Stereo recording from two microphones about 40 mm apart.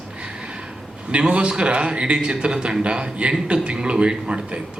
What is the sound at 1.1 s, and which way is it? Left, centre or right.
A man's voice, right.